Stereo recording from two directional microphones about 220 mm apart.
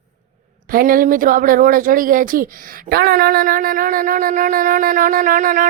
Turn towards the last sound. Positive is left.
turn(degrees=-40)  # may be behind; listen again after turning